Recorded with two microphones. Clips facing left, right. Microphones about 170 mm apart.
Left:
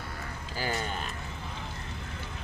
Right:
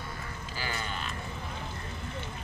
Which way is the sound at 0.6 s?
40° left (ahead or behind).